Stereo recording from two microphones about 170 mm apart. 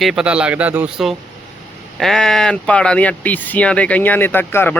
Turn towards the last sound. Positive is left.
turn(degrees=10)  # may be behind; listen again after turning